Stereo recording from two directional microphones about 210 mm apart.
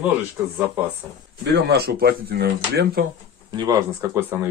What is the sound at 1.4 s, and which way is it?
Speech, 50° right (ahead or behind).